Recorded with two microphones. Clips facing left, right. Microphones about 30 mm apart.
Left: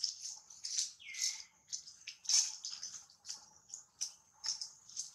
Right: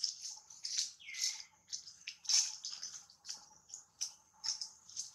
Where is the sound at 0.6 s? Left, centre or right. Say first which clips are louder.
Right 1 dB; centre.